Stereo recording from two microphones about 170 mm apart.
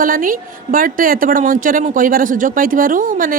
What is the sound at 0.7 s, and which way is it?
Speech, 55° right (ahead or behind).